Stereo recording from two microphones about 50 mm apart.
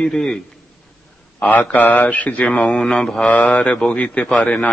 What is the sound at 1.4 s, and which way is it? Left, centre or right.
A man's voice, left.